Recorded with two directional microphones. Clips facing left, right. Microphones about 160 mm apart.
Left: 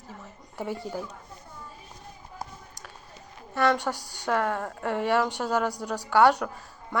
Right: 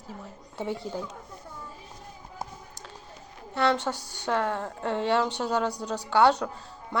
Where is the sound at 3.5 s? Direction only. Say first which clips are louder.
Left 1 dB; 20° right (ahead or behind).